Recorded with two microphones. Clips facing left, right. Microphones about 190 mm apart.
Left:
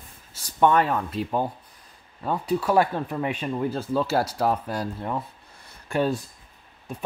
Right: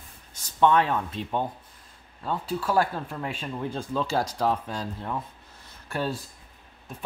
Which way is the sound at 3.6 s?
5° left (ahead or behind).